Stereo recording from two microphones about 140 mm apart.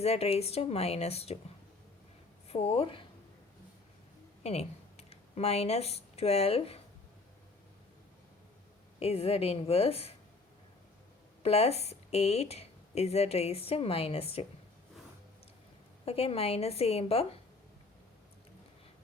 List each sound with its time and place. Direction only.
0.0 s speech: 45° left (ahead or behind)
2.5 s speech: 45° left (ahead or behind)
4.4 s speech: 50° left (ahead or behind)
9.0 s speech: 45° left (ahead or behind)
11.4 s speech: 50° left (ahead or behind)
16.0 s speech: 45° left (ahead or behind)